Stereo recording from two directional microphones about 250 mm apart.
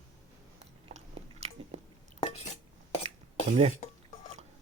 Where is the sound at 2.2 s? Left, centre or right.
Left.